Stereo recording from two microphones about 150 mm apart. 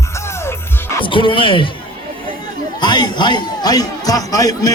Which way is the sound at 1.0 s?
35° left (ahead or behind).